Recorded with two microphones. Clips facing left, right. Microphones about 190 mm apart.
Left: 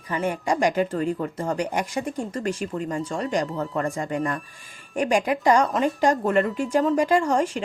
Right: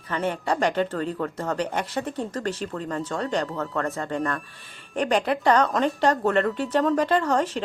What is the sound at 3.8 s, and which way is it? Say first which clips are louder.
Speech: left 1 dB; 15° left (ahead or behind).